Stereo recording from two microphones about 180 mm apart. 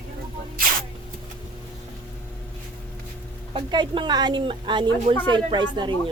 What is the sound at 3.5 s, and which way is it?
Speech, 25° right (ahead or behind).